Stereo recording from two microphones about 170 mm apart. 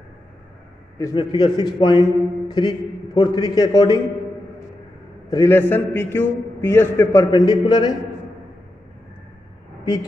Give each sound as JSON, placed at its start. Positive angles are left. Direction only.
{"t": 0.9, "sound": "a man's voice", "side_deg": 20}
{"t": 5.3, "sound": "a man's voice", "side_deg": 15}
{"t": 7.2, "sound": "a man's voice", "side_deg": 25}